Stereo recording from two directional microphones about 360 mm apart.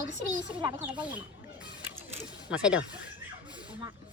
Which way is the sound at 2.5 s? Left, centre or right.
Centre.